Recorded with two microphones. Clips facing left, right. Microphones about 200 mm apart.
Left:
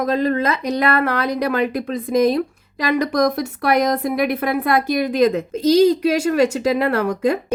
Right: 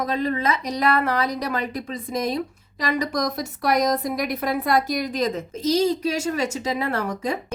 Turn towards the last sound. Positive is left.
turn(degrees=65)  # may be behind; listen again after turning